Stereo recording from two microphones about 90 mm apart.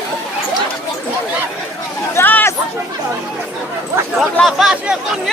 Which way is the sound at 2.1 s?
25° left (ahead or behind).